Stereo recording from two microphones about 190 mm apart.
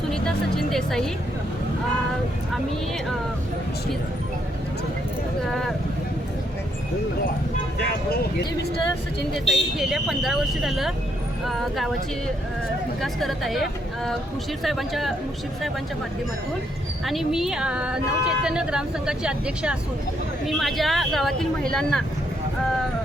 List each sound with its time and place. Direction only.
0.1 s speech: centre (ahead or behind)
7.8 s speech: 55° left (ahead or behind)
9.3 s speech: centre (ahead or behind)
13.0 s speech: centre (ahead or behind)
17.1 s speech: centre (ahead or behind)